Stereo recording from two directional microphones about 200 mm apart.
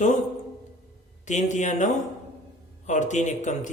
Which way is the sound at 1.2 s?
35° left (ahead or behind).